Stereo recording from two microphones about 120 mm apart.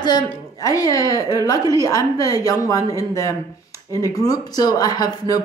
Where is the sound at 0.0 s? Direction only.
35° left (ahead or behind).